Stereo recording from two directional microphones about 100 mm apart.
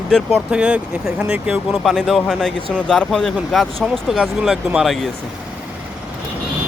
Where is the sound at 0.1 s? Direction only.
5° left (ahead or behind).